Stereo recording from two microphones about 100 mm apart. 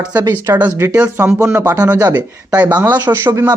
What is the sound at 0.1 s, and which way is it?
Speech, 20° right (ahead or behind).